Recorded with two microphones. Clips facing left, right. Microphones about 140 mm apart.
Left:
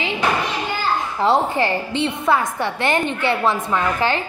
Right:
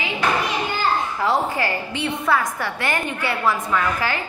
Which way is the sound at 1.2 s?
25° left (ahead or behind).